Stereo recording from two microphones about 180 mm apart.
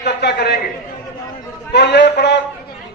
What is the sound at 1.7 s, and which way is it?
Speech, 70° left (ahead or behind).